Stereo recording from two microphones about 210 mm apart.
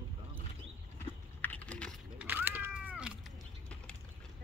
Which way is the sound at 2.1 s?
10° right (ahead or behind).